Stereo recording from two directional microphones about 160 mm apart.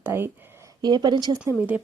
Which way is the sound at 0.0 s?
15° right (ahead or behind).